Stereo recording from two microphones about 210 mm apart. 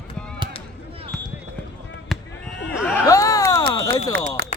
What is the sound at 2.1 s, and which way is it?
Fireworks, centre (ahead or behind).